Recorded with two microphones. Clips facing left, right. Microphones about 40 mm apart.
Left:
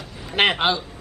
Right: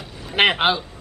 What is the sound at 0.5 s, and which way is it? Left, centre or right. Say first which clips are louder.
Speech: right 2 dB; centre.